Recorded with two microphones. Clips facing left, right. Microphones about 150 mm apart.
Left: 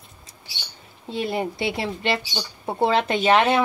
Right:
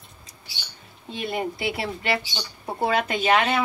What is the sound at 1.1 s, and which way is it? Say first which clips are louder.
A woman's voice: left 3 dB; 30° left (ahead or behind).